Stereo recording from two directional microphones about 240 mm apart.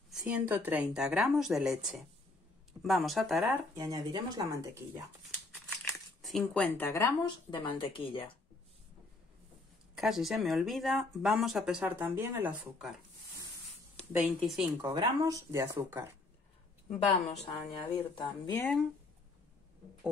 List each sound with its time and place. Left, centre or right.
0.1 s speech: centre
3.7 s speech: centre
5.9 s speech: centre; by 8.2 s left
9.9 s speech: centre
14.1 s speech: centre
14.8 s speech: centre
17.3 s speech: left